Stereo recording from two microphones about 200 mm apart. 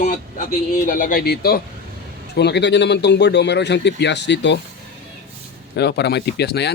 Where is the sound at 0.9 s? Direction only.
40° left (ahead or behind); by 4.6 s 60° left (ahead or behind).